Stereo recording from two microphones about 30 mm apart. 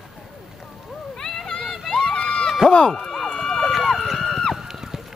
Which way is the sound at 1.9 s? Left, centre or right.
Left.